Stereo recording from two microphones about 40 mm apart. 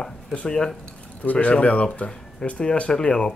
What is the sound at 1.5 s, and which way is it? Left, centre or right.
Speech, left.